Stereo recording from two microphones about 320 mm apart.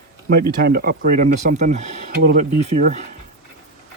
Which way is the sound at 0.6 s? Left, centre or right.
Right.